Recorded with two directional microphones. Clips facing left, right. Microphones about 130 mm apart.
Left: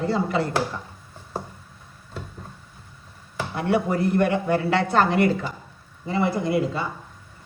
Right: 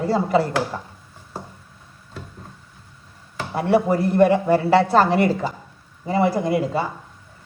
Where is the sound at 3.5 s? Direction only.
35° right (ahead or behind).